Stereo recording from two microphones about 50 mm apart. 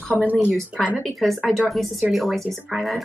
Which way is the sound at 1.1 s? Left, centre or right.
Centre.